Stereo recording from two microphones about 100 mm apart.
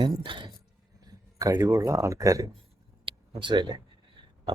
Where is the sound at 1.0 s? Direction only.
35° right (ahead or behind).